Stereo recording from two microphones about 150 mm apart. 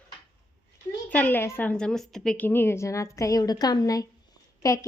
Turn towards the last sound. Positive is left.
turn(degrees=20)  # may be behind; listen again after turning